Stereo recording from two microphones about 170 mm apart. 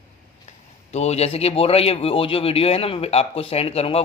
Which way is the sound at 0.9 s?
40° left (ahead or behind).